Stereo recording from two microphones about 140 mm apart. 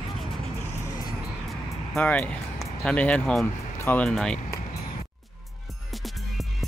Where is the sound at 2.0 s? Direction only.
10° left (ahead or behind).